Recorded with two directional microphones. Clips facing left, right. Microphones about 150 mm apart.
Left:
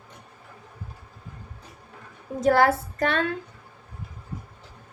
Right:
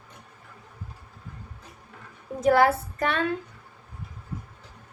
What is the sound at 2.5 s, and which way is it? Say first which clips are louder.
Speech: even; 35° left (ahead or behind).